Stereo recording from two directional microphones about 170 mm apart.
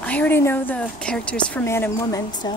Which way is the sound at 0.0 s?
10° left (ahead or behind).